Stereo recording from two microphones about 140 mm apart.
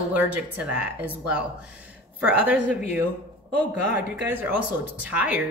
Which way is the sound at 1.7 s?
10° right (ahead or behind).